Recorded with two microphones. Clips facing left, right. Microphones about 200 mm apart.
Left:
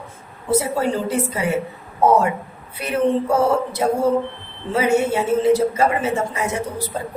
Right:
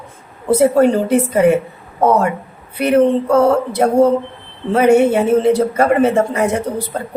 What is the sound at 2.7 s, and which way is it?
A woman's voice, 60° right (ahead or behind).